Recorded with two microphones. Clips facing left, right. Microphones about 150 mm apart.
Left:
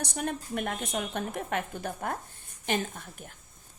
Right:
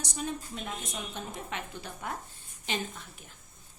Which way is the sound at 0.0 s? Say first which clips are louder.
Left 3 dB; 60° left (ahead or behind).